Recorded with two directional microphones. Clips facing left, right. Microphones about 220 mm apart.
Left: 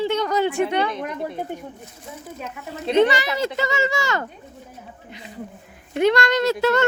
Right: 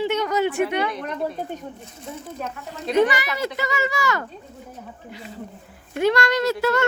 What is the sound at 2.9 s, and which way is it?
A child's voice, 25° left (ahead or behind).